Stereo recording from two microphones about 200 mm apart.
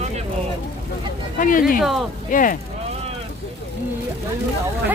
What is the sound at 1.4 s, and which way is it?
Speech, 40° left (ahead or behind).